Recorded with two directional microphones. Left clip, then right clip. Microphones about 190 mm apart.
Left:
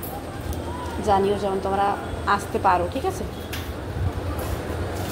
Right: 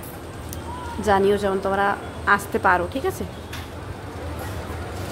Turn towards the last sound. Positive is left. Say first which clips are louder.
# right 1 dB
turn(degrees=-35)  # may be behind; listen again after turning